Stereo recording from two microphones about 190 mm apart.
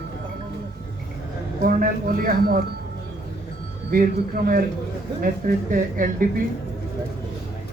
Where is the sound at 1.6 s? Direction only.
50° right (ahead or behind).